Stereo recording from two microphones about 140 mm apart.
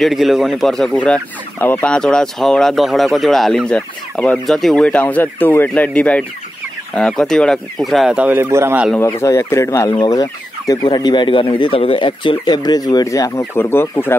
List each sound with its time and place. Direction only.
0.0 s speech: centre (ahead or behind)
8.5 s speech: 15° right (ahead or behind)
9.0 s chicken: 20° left (ahead or behind)